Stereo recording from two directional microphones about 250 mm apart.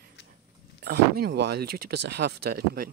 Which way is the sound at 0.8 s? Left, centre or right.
Right.